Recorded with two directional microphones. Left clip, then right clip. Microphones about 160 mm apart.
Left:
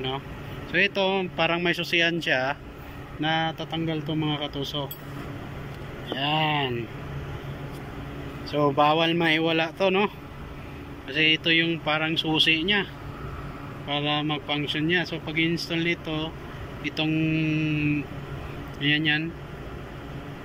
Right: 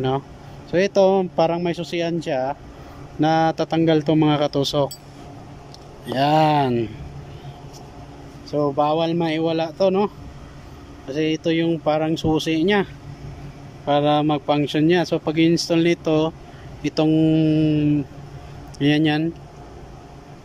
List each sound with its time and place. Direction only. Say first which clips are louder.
0.7 s speech: right 7 dB; 50° right (ahead or behind)
1.6 s a man's voice: left 1 dB; 25° right (ahead or behind)
3.2 s speech: right 8 dB; 55° right (ahead or behind); by 4.9 s 75° right (ahead or behind)
6.0 s speech: right 8 dB; 60° right (ahead or behind)
8.7 s a man's voice: right 1 dB; 25° right (ahead or behind); by 12.8 s 55° right (ahead or behind)
13.8 s speech: right 9 dB; 60° right (ahead or behind)